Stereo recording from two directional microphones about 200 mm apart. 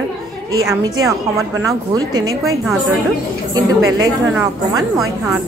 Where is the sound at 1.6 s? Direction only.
20° right (ahead or behind).